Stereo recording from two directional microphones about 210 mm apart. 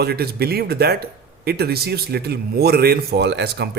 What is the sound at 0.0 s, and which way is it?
Speech, 50° right (ahead or behind).